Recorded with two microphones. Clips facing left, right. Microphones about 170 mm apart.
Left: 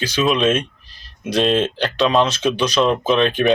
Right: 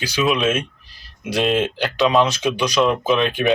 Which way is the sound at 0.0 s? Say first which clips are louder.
Left 2 dB; 10° right (ahead or behind).